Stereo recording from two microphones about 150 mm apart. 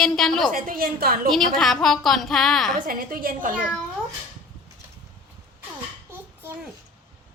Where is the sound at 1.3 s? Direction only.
Centre (ahead or behind).